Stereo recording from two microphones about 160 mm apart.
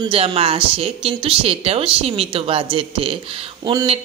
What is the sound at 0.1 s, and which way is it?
Speech, 35° right (ahead or behind).